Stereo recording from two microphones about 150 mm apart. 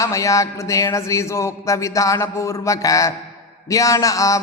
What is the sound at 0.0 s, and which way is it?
Speech, 20° left (ahead or behind).